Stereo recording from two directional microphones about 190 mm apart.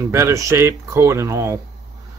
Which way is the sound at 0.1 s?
15° right (ahead or behind).